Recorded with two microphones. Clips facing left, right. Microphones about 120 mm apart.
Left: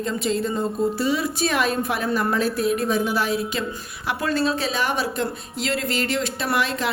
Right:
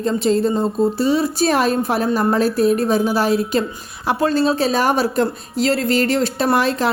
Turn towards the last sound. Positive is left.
turn(degrees=-35)  # may be behind; listen again after turning